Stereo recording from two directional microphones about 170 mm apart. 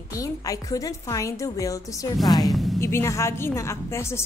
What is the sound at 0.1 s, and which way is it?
A woman's voice, 20° left (ahead or behind).